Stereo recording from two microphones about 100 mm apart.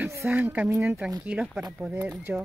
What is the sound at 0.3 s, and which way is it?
A child's voice, 15° right (ahead or behind).